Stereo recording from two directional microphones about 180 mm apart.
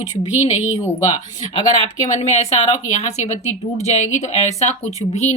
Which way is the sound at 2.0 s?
40° left (ahead or behind).